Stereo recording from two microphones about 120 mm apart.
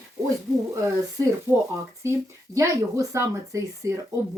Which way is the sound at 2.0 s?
25° right (ahead or behind).